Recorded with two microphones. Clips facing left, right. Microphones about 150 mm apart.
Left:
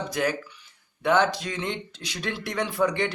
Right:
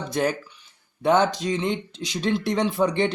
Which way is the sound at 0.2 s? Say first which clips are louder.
Right 4 dB; 30° right (ahead or behind).